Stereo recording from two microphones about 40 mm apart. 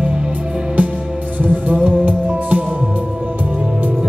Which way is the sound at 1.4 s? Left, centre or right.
Right.